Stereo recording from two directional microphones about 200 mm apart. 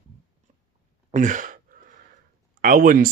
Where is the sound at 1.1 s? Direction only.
40° right (ahead or behind).